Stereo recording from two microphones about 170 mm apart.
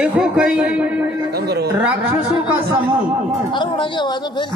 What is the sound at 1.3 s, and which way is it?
Speech, 70° right (ahead or behind).